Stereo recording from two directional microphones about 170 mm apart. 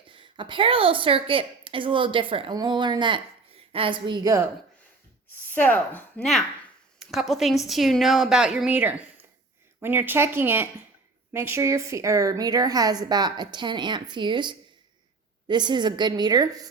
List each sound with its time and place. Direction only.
0.1 s a woman's voice: 30° right (ahead or behind)
5.5 s a woman's voice: 10° left (ahead or behind); by 16.6 s 20° right (ahead or behind)